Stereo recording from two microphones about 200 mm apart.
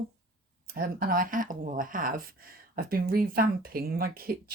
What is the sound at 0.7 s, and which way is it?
Speech, 45° right (ahead or behind).